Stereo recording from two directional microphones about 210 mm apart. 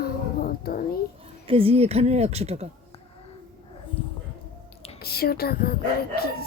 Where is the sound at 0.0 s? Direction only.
45° left (ahead or behind).